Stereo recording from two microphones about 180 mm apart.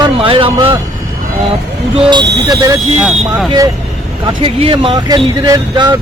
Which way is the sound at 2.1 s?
25° right (ahead or behind).